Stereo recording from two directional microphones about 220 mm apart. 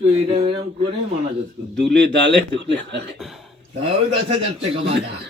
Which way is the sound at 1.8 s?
5° left (ahead or behind).